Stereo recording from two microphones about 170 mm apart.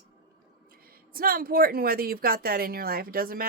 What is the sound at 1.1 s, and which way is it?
Speech, 60° right (ahead or behind).